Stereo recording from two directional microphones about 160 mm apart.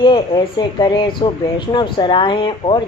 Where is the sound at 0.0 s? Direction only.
30° left (ahead or behind).